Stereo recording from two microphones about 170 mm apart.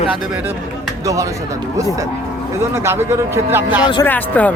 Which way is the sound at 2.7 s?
15° right (ahead or behind).